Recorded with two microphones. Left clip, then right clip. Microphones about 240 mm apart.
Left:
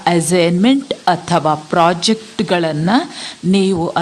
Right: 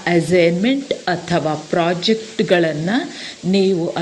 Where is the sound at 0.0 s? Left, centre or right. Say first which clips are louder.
Left 1 dB; centre.